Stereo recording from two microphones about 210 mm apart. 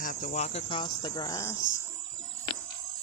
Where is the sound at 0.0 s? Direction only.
40° left (ahead or behind); by 1.5 s 15° left (ahead or behind).